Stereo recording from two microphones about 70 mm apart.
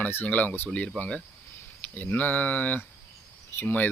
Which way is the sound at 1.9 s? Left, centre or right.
Left.